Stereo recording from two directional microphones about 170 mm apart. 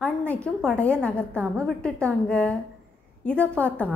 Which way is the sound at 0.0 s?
5° left (ahead or behind).